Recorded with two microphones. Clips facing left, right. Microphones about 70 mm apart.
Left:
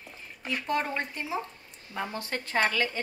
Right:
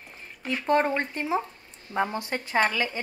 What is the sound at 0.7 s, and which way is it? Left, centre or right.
Speech, right.